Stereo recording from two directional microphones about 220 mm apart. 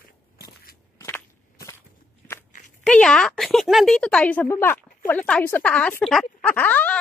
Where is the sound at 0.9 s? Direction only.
10° left (ahead or behind).